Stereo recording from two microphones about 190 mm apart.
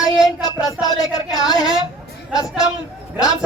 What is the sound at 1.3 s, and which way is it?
Speech, 20° left (ahead or behind).